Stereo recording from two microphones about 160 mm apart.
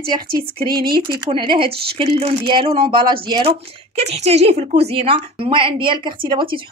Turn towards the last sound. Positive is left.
turn(degrees=-30)  # may be behind; listen again after turning